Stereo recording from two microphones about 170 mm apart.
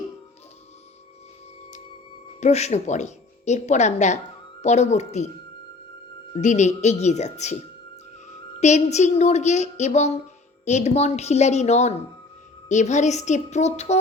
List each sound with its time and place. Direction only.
2.4 s a woman's voice: 40° left (ahead or behind)
6.3 s a woman's voice: 45° left (ahead or behind)
8.6 s a woman's voice: 40° left (ahead or behind)